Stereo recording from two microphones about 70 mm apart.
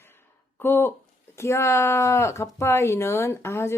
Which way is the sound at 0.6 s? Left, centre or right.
Left.